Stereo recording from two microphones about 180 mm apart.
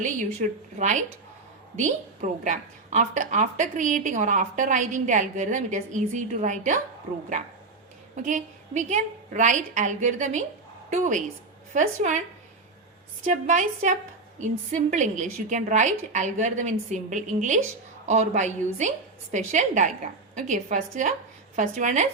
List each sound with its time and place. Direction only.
0.8 s a woman's voice: 40° right (ahead or behind)
2.4 s a woman's voice: 45° right (ahead or behind)
8.1 s a woman's voice: 45° right (ahead or behind)
13.2 s a woman's voice: 45° right (ahead or behind)